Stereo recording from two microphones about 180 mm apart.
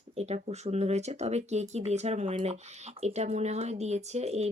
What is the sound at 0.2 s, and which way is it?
Speech, 35° right (ahead or behind).